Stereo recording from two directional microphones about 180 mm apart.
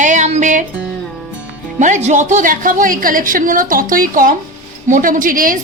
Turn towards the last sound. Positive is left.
turn(degrees=-50)  # may be behind; listen again after turning